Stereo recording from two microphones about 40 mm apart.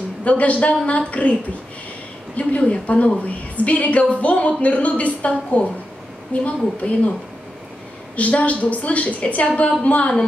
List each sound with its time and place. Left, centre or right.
0.2 s a woman's voice: left
2.3 s a woman's voice: left
8.2 s a woman's voice: left